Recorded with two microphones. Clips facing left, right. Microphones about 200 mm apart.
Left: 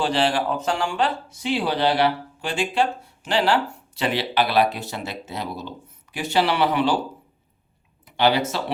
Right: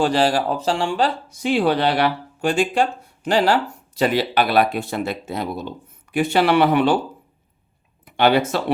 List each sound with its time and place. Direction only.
0.0 s speech: 45° right (ahead or behind)
8.0 s speech: 55° right (ahead or behind)